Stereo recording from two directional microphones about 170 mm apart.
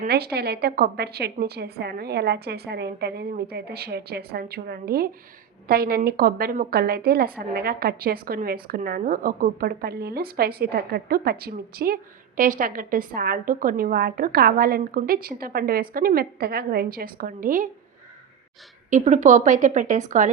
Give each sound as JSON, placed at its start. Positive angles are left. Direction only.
{"t": 0.3, "sound": "a woman's voice", "side_deg": -70}
{"t": 18.9, "sound": "a woman's voice", "side_deg": -45}